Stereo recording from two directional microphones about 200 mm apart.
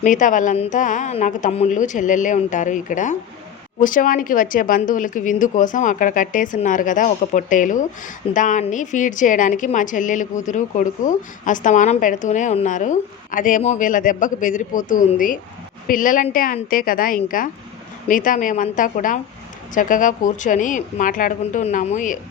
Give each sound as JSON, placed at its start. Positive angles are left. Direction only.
{"t": 0.0, "sound": "a woman's voice", "side_deg": 40}